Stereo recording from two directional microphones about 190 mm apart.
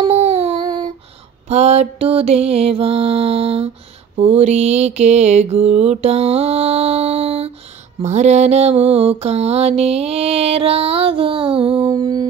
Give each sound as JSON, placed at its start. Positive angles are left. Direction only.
{"t": 0.0, "sound": "a sound", "side_deg": -35}
{"t": 0.6, "sound": "child singing", "side_deg": -20}
{"t": 1.5, "sound": "mantra", "side_deg": -35}